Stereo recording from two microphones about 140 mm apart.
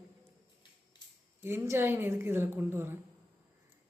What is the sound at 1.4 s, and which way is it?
Speech, 20° right (ahead or behind).